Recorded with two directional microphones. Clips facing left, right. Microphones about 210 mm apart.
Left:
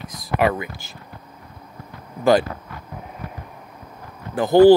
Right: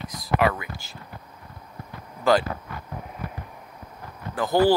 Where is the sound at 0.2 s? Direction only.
20° left (ahead or behind).